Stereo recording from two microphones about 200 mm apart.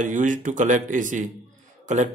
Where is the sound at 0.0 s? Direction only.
40° right (ahead or behind).